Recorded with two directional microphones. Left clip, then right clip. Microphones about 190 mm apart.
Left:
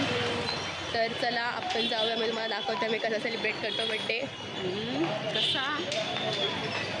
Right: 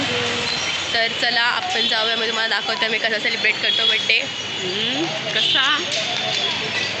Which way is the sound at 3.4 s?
20° left (ahead or behind).